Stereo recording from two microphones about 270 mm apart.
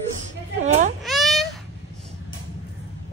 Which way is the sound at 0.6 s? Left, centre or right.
Right.